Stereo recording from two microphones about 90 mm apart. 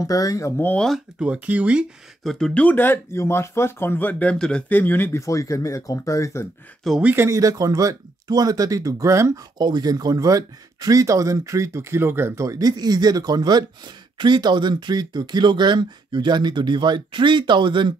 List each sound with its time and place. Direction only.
0.0 s speech: 40° left (ahead or behind)
0.7 s speech: 5° left (ahead or behind)
1.2 s speech: 15° right (ahead or behind)
2.2 s speech: 5° left (ahead or behind)
2.6 s speech: 20° left (ahead or behind)
5.2 s speech: 35° left (ahead or behind)
7.0 s speech: 20° right (ahead or behind)
7.2 s speech: 40° right (ahead or behind)
9.6 s speech: 50° right (ahead or behind)